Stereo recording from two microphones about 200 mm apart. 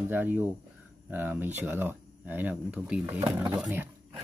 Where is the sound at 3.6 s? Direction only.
5° right (ahead or behind).